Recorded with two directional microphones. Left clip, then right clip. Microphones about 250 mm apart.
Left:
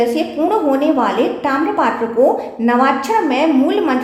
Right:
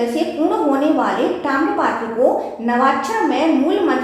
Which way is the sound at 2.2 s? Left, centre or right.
Left.